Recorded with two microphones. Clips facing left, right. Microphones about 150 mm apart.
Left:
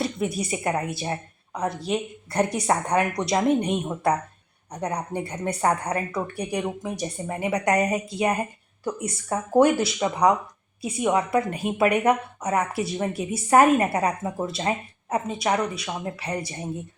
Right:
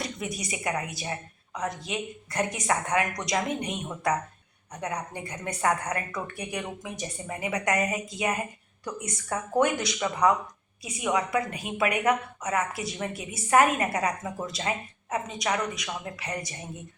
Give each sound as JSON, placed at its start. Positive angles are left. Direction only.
{"t": 0.0, "sound": "a woman's voice", "side_deg": 30}